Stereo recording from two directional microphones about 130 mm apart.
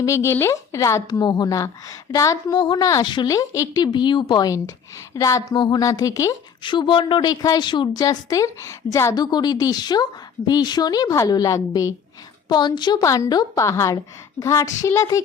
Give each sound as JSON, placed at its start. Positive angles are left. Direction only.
{"t": 0.0, "sound": "a woman's voice", "side_deg": 20}
{"t": 1.2, "sound": "a woman's voice", "side_deg": 30}
{"t": 6.6, "sound": "a woman's voice", "side_deg": 40}